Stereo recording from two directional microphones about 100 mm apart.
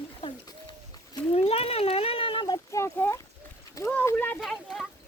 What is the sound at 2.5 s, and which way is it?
Speech, 30° left (ahead or behind).